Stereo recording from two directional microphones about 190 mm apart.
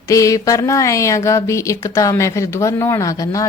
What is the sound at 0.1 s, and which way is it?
Speech, 15° left (ahead or behind).